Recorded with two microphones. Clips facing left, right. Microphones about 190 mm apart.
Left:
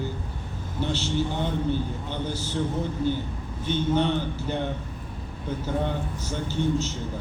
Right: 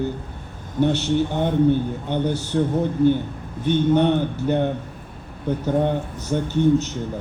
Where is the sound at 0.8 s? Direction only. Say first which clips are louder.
Right 7 dB; 55° right (ahead or behind).